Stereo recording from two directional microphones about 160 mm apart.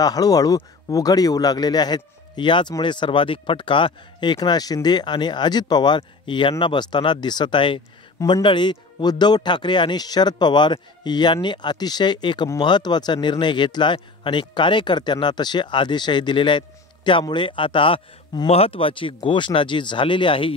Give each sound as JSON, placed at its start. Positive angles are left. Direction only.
{"t": 0.0, "sound": "a man's voice", "side_deg": 25}